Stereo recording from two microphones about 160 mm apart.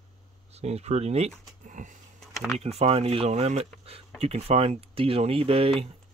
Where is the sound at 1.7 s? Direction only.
55° right (ahead or behind).